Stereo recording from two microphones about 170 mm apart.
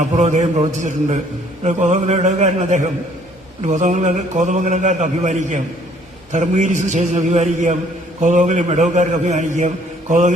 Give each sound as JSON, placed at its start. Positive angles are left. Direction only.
{"t": 0.2, "sound": "a man's voice", "side_deg": -45}